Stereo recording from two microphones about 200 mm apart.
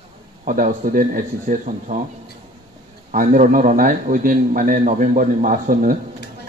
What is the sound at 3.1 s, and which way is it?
A man's voice, 40° right (ahead or behind).